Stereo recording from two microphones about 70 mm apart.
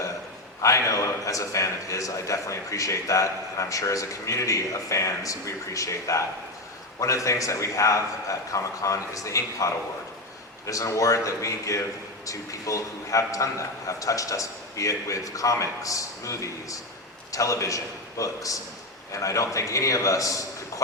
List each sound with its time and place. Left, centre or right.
0.6 s a man's voice: left